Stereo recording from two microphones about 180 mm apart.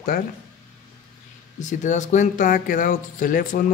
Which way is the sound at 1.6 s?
45° left (ahead or behind).